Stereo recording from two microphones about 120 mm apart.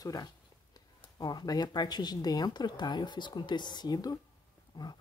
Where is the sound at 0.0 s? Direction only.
30° left (ahead or behind).